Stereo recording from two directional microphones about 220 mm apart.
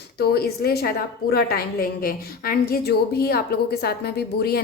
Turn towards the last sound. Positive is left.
turn(degrees=45)  # may be behind; listen again after turning